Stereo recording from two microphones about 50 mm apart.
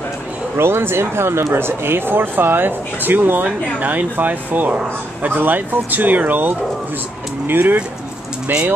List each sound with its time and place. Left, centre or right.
0.6 s speech: right